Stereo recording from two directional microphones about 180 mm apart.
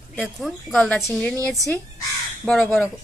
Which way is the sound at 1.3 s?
20° right (ahead or behind).